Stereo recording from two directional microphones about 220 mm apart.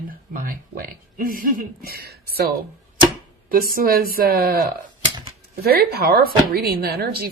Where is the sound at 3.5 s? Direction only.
40° right (ahead or behind).